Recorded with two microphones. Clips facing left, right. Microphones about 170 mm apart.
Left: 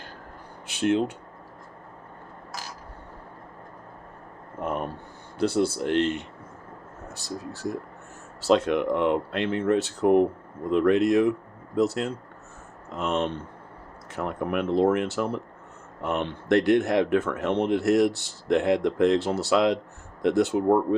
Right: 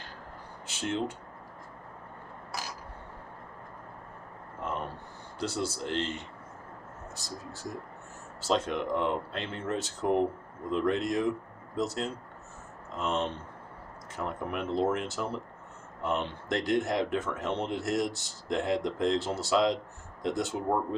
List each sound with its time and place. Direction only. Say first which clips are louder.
0.7 s speech: left 9 dB; 65° left (ahead or behind)
5.4 s speech: left 9 dB; 60° left (ahead or behind)